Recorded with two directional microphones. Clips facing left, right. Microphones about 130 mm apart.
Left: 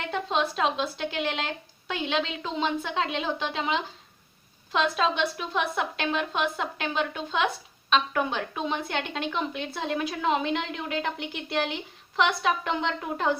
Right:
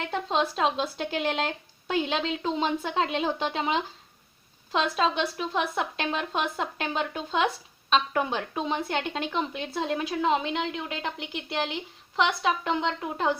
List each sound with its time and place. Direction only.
0.1 s a woman's voice: 35° right (ahead or behind)